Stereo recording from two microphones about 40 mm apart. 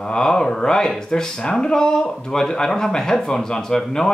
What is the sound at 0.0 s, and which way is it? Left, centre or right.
Speech, centre.